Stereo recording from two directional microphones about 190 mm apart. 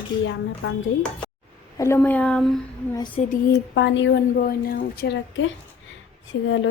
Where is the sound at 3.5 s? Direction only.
75° left (ahead or behind).